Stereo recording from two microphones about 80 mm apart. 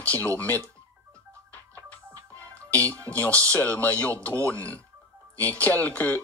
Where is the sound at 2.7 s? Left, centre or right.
Right.